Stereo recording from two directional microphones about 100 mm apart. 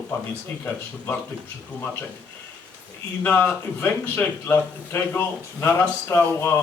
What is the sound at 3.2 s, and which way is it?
A man's voice, 15° left (ahead or behind).